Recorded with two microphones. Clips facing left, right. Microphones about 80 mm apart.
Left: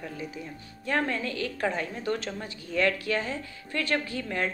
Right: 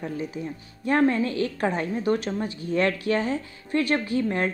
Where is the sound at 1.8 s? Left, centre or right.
Centre.